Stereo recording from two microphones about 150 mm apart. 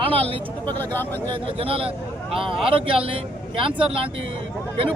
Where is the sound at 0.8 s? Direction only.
15° left (ahead or behind).